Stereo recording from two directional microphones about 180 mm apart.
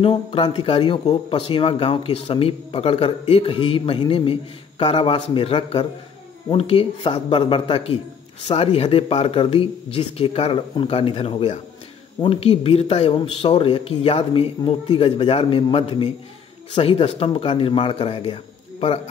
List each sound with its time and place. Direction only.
0.0 s speech: 30° left (ahead or behind)